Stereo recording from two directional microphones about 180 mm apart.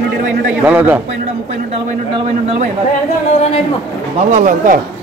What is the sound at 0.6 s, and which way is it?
Speech, 10° right (ahead or behind).